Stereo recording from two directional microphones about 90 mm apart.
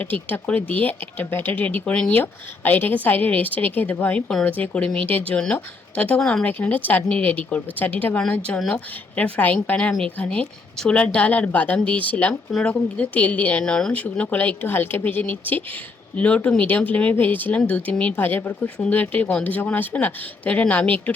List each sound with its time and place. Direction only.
0.0 s a woman's voice: 20° left (ahead or behind)
6.5 s a woman's voice: 20° left (ahead or behind)
12.5 s speech: centre (ahead or behind)
13.0 s a woman's voice: 15° left (ahead or behind)